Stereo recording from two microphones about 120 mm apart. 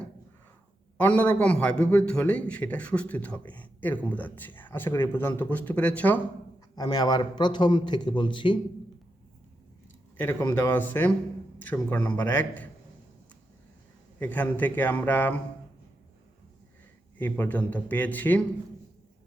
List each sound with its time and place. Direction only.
0.9 s a man's voice: 15° left (ahead or behind)
6.7 s a man's voice: 35° left (ahead or behind)
10.2 s a man's voice: 20° left (ahead or behind)
14.2 s a man's voice: 15° left (ahead or behind)
17.2 s a man's voice: 15° left (ahead or behind)